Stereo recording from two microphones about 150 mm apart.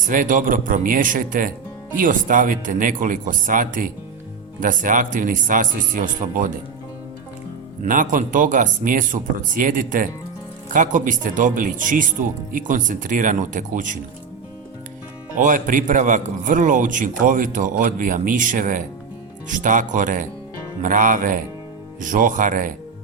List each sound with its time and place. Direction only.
0.1 s a man's voice: 60° right (ahead or behind)
7.9 s a man's voice: 65° right (ahead or behind)
15.4 s a man's voice: 60° right (ahead or behind)